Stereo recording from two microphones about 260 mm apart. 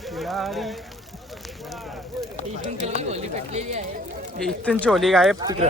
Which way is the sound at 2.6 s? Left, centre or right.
Right.